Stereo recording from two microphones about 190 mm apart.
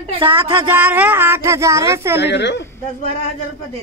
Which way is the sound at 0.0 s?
30° right (ahead or behind).